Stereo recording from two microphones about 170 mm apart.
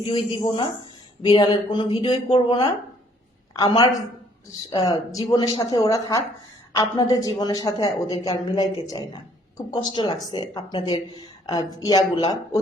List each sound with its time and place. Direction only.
0.0 s speech: 30° left (ahead or behind)